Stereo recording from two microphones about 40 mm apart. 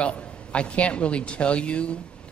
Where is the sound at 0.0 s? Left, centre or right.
Left.